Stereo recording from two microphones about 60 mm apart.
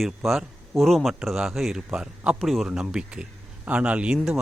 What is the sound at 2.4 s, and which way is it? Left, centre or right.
Speech, centre.